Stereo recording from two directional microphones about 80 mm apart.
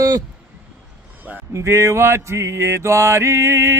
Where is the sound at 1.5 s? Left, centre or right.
Right.